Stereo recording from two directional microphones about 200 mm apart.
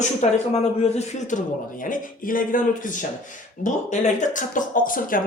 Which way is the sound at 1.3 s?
40° left (ahead or behind).